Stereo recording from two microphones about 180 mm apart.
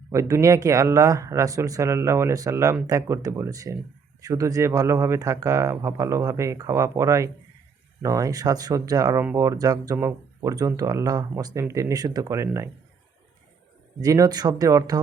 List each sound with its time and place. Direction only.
0.1 s speech: 15° right (ahead or behind)
14.0 s speech: 20° right (ahead or behind)